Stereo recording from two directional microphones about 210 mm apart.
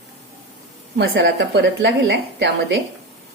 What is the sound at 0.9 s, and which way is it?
A woman's voice, 50° right (ahead or behind).